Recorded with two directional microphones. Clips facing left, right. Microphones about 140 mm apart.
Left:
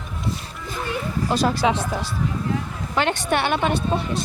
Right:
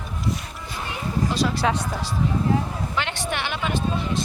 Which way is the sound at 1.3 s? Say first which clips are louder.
Left 5 dB; 45° left (ahead or behind).